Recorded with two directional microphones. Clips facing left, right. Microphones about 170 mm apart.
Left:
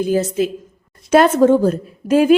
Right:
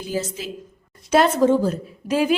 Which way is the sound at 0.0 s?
55° left (ahead or behind).